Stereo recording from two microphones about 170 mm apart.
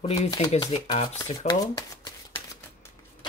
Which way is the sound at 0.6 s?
25° left (ahead or behind).